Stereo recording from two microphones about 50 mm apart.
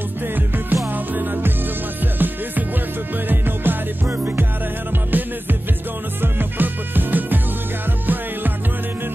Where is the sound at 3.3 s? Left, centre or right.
Right.